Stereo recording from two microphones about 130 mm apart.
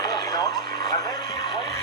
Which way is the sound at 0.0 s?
30° left (ahead or behind).